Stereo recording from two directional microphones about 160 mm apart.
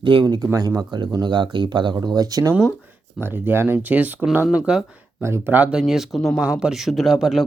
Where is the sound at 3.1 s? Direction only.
10° right (ahead or behind).